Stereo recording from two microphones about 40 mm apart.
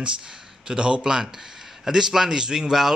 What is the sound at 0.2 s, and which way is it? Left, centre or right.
A man's voice, centre.